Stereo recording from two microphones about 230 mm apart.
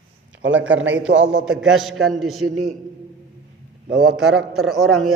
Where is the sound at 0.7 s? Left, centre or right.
Right.